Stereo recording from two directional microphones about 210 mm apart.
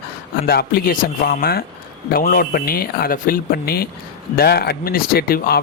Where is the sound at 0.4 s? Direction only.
45° left (ahead or behind).